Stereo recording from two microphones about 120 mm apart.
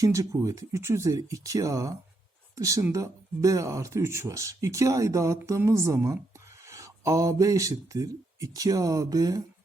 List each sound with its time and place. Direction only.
0.0 s speech: 25° right (ahead or behind)